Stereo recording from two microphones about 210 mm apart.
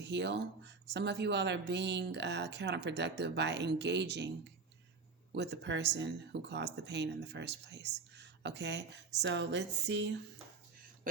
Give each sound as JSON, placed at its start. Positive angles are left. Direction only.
{"t": 0.0, "sound": "speech", "side_deg": -55}
{"t": 5.3, "sound": "speech", "side_deg": -55}